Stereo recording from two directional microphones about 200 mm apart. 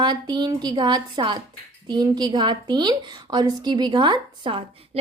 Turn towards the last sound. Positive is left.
turn(degrees=-25)  # may be behind; listen again after turning